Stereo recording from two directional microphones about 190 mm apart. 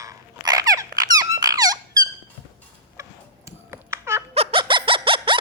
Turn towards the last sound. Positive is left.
turn(degrees=-25)  # may be behind; listen again after turning